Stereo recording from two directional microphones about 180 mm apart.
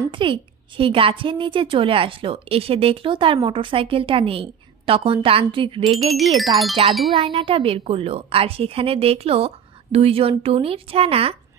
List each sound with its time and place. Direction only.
0.1 s a woman's voice: 30° right (ahead or behind)
5.9 s speech: centre (ahead or behind)
7.1 s a woman's voice: 30° right (ahead or behind)